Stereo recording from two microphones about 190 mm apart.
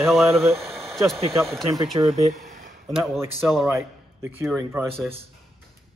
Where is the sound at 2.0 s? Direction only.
25° right (ahead or behind).